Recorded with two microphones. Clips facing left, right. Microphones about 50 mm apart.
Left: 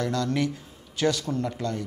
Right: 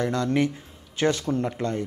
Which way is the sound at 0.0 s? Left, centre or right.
Right.